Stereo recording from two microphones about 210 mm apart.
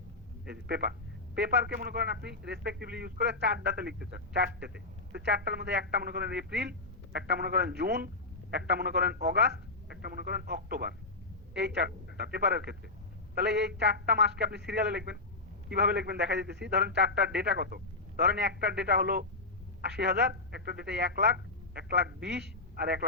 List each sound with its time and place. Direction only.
0.4 s a man's voice: 50° right (ahead or behind)